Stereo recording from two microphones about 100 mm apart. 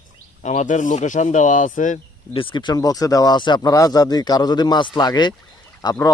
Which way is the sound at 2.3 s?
60° left (ahead or behind).